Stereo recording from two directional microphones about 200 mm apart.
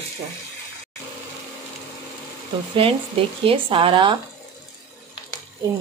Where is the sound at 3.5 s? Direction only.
25° right (ahead or behind).